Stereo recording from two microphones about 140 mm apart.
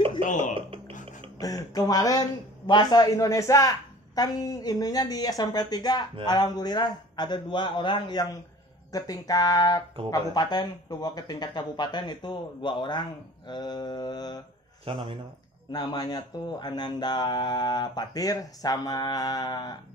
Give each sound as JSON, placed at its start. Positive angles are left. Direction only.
{"t": 0.2, "sound": "speech", "side_deg": 65}
{"t": 0.6, "sound": "a sound", "side_deg": -40}
{"t": 1.4, "sound": "a man's voice", "side_deg": 25}
{"t": 14.9, "sound": "speech", "side_deg": -35}
{"t": 15.7, "sound": "a man's voice", "side_deg": 30}